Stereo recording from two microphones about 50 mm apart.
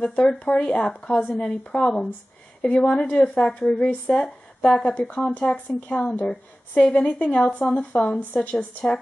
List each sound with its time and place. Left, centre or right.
0.0 s a woman's voice: left
8.3 s a woman's voice: left